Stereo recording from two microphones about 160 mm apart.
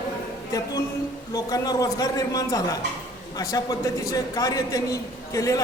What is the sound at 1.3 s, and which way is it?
A man's voice, 25° left (ahead or behind).